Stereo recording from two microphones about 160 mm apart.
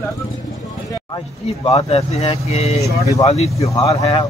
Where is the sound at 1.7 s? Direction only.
40° left (ahead or behind).